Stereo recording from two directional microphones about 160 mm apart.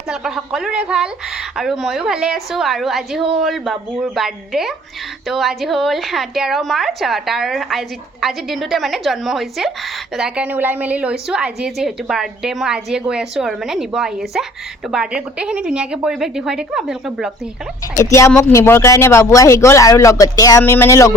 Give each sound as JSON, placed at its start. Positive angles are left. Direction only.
{"t": 0.1, "sound": "a woman's voice", "side_deg": -5}
{"t": 18.1, "sound": "speech", "side_deg": 15}